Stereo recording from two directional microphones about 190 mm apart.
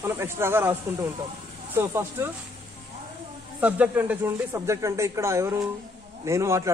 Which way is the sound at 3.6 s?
10° right (ahead or behind).